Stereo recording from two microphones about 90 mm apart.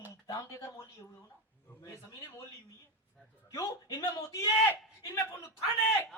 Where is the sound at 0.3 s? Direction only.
40° left (ahead or behind).